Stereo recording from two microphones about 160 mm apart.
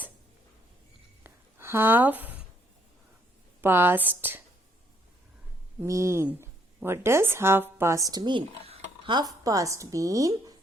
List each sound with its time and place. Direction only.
1.2 s a sound: 15° right (ahead or behind)
3.6 s speech: 15° right (ahead or behind)
5.8 s speech: 15° right (ahead or behind)